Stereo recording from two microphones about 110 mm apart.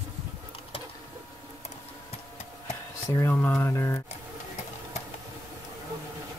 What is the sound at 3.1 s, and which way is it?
Speech, 25° left (ahead or behind).